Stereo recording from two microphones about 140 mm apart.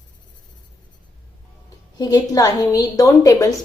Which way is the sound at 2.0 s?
25° left (ahead or behind).